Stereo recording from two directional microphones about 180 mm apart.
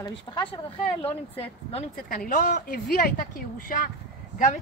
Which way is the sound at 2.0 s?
50° left (ahead or behind).